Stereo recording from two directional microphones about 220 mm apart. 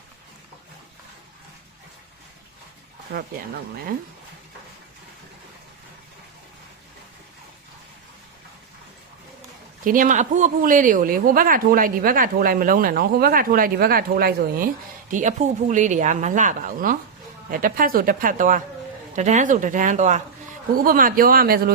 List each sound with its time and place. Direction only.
3.1 s speech: 45° right (ahead or behind)
9.8 s speech: 40° right (ahead or behind)